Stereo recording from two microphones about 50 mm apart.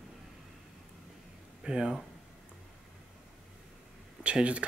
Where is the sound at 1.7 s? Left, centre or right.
Centre.